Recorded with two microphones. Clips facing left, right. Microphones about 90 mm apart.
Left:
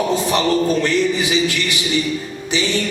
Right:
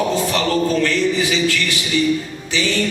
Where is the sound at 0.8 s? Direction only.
20° left (ahead or behind).